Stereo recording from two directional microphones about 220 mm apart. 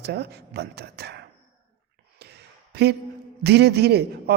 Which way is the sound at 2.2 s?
50° right (ahead or behind).